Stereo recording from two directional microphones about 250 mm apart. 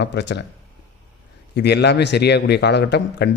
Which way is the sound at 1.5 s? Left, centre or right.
Left.